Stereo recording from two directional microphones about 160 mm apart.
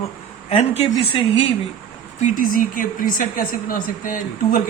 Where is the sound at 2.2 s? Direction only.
55° left (ahead or behind).